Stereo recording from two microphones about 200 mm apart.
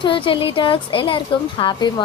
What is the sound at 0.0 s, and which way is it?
A woman's voice, 25° left (ahead or behind).